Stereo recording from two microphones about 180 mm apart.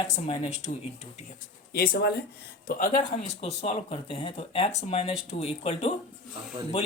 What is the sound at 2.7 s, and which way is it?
Speech, 45° left (ahead or behind).